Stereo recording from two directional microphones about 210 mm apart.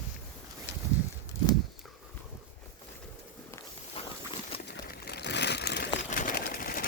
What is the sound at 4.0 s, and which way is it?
Clip-clop, 25° left (ahead or behind).